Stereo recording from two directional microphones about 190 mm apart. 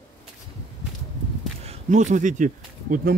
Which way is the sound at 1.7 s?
40° right (ahead or behind).